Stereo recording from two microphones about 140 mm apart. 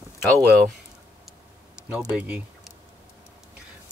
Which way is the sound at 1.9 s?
5° right (ahead or behind).